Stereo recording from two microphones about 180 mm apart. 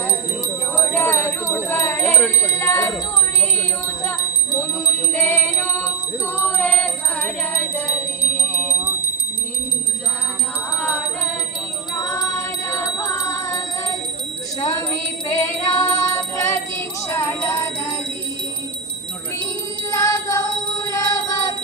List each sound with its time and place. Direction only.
0.0 s jingle bell: 15° left (ahead or behind)
4.5 s music: 15° left (ahead or behind)
10.8 s music: 5° left (ahead or behind)
19.9 s music: 20° left (ahead or behind)